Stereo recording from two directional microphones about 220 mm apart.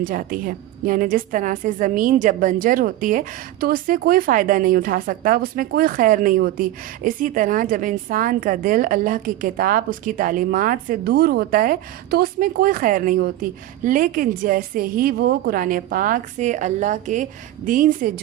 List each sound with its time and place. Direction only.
0.0 s a woman's voice: 40° right (ahead or behind)